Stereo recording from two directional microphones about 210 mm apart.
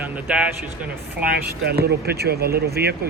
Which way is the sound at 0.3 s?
5° right (ahead or behind).